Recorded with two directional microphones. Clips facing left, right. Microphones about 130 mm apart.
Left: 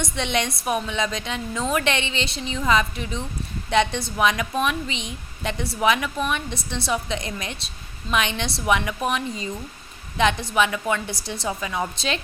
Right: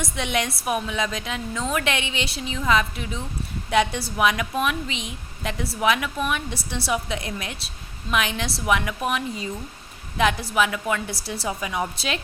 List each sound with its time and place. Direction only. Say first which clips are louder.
0.0 s a woman's voice: left 1 dB; 5° right (ahead or behind)